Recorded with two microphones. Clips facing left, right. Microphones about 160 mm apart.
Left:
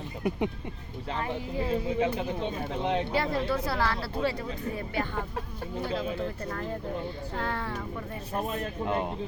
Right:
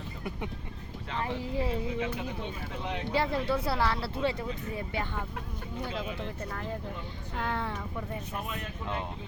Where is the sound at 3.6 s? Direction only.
25° right (ahead or behind).